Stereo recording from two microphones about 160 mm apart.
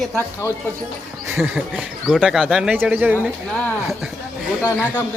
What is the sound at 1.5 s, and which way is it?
Speech, 5° right (ahead or behind).